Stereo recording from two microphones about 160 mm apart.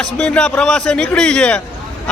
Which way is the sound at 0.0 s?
5° left (ahead or behind).